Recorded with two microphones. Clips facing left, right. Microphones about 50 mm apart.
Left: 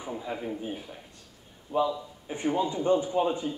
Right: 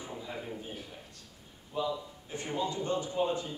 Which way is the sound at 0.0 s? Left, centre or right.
Left.